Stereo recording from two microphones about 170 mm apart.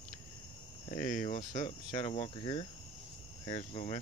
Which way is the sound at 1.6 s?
25° left (ahead or behind).